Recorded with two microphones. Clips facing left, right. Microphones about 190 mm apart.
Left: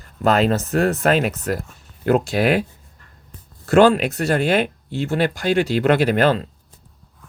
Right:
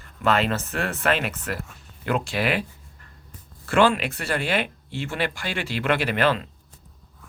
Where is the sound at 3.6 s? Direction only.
40° left (ahead or behind).